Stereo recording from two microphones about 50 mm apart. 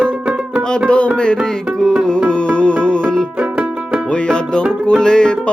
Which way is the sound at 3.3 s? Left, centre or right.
Right.